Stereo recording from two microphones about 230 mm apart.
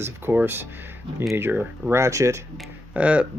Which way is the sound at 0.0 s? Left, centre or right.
Centre.